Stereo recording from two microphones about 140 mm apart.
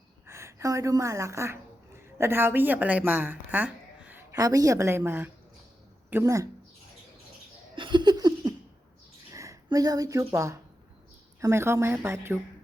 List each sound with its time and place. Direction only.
0.3 s a woman's voice: 20° right (ahead or behind)
7.8 s laughter: 35° right (ahead or behind)
9.3 s a sound: 20° right (ahead or behind)
9.6 s a woman's voice: 25° right (ahead or behind)